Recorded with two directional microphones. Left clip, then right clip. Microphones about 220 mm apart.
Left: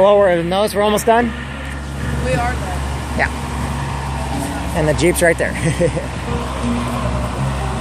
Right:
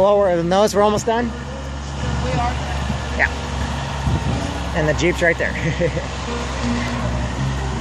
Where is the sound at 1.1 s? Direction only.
15° left (ahead or behind).